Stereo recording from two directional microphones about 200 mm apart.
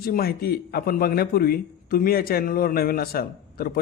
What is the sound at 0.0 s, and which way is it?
A man's voice, 50° left (ahead or behind).